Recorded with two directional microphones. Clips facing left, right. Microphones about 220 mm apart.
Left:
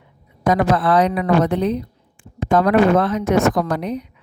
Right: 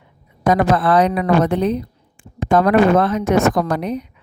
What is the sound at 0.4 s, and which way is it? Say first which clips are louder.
Speech: right 1 dB; 55° right (ahead or behind).